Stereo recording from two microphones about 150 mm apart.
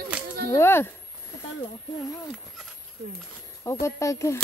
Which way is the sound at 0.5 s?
15° left (ahead or behind).